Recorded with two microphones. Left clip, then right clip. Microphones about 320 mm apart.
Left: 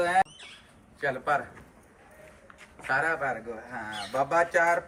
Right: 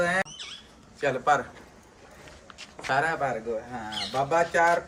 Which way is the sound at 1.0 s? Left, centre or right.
Centre.